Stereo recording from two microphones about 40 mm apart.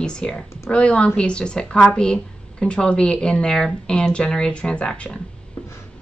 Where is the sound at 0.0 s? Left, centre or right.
Left.